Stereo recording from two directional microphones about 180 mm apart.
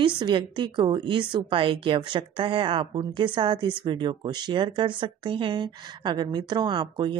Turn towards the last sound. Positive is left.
turn(degrees=-25)  # may be behind; listen again after turning